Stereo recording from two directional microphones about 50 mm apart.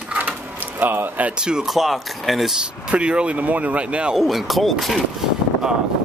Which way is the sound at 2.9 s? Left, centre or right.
Right.